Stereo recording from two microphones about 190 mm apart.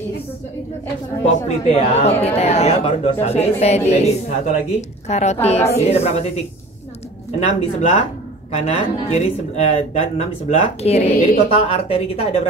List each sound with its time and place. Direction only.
1.7 s a man's voice: 35° left (ahead or behind)
7.3 s a man's voice: 35° left (ahead or behind)